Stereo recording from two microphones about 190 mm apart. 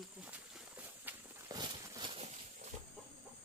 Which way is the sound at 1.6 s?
25° right (ahead or behind).